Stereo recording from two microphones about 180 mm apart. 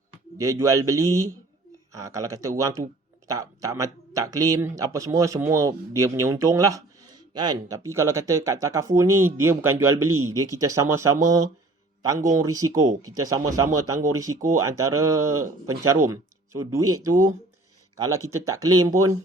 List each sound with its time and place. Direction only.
0.3 s speech: 15° right (ahead or behind)